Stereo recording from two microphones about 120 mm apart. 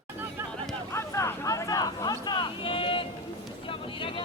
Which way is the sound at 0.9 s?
25° left (ahead or behind).